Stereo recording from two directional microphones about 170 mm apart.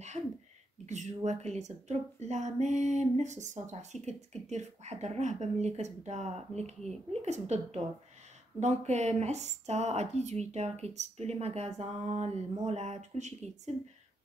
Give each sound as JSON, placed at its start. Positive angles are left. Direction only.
{"t": 0.8, "sound": "speech", "side_deg": -45}